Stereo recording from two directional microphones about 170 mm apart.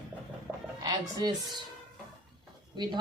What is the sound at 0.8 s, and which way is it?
Speech, 20° right (ahead or behind).